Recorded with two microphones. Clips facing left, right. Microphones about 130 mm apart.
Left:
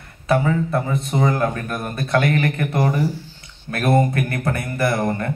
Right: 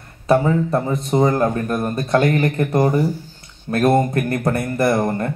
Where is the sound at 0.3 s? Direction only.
35° right (ahead or behind).